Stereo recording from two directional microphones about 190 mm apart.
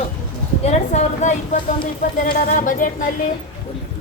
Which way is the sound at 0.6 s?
35° left (ahead or behind).